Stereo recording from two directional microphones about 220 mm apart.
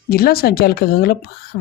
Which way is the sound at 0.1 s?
45° left (ahead or behind).